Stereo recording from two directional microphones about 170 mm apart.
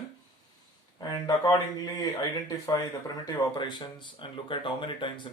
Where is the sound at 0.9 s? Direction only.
25° left (ahead or behind).